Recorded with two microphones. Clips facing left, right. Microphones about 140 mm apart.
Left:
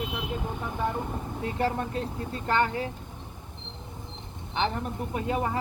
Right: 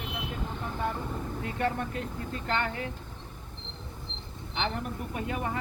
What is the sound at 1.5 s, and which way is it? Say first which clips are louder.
Speech: left 3 dB; 30° left (ahead or behind).